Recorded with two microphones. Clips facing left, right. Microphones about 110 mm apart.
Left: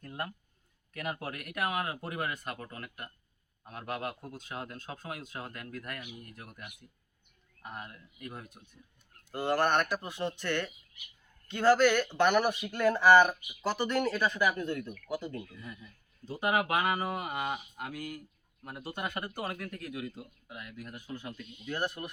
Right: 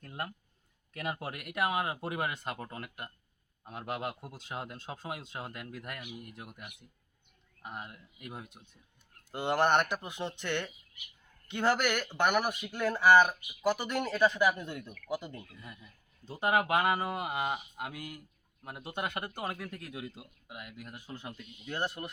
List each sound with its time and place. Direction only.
0.9 s speech: 25° right (ahead or behind)
7.6 s speech: 20° right (ahead or behind)